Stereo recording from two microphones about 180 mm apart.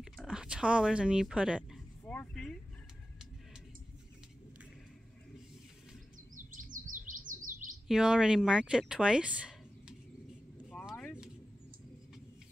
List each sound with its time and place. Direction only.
0.0 s speech: 5° right (ahead or behind)
2.0 s vehicle: 5° left (ahead or behind)
6.3 s chirp: 45° right (ahead or behind)
7.9 s speech: 5° right (ahead or behind)